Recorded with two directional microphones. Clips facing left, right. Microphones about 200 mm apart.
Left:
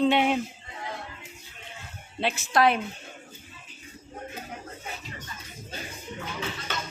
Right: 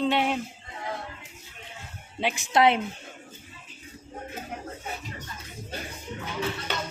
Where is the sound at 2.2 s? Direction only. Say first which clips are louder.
Right 1 dB; 15° right (ahead or behind).